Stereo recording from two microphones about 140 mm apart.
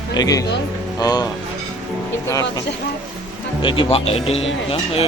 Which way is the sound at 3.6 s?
40° left (ahead or behind).